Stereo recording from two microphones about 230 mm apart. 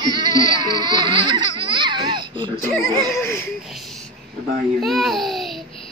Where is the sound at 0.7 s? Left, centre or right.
Centre.